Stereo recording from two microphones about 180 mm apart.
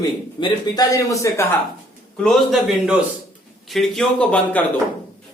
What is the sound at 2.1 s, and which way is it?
Speech, centre (ahead or behind).